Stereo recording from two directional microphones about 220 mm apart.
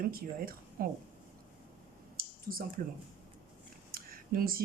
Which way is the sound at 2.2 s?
40° right (ahead or behind).